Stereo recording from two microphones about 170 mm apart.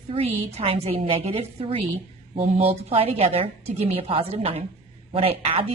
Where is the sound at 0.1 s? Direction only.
35° right (ahead or behind).